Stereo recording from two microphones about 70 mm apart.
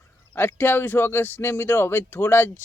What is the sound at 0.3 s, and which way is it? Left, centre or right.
Speech, left.